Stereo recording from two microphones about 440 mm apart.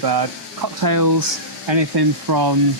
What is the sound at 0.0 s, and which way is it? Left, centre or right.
Speech, right.